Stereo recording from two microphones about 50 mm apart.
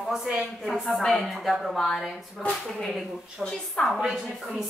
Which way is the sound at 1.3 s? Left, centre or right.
Centre.